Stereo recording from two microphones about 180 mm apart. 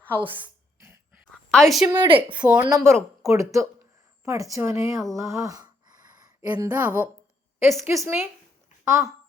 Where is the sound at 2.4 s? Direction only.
5° right (ahead or behind).